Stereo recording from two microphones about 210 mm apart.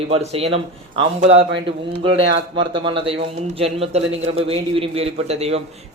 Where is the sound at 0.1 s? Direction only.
30° right (ahead or behind).